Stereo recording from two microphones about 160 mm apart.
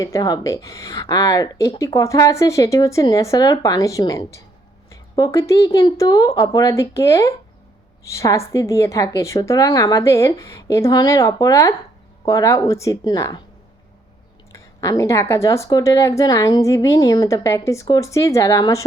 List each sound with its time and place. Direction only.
0.0 s speech: 25° left (ahead or behind)
14.5 s speech: 20° left (ahead or behind)